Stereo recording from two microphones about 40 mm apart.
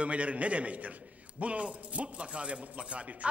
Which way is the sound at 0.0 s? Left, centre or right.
Right.